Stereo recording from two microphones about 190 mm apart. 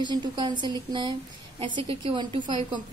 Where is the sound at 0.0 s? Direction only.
25° right (ahead or behind).